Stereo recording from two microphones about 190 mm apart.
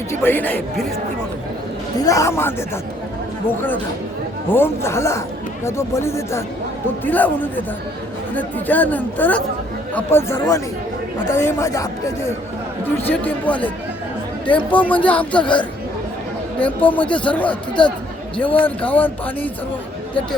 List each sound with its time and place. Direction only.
0.1 s a man's voice: 10° left (ahead or behind)
2.0 s a man's voice: 15° left (ahead or behind)
16.6 s a man's voice: 5° left (ahead or behind)